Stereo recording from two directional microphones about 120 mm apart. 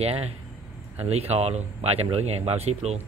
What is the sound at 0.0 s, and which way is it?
Speech, 55° right (ahead or behind).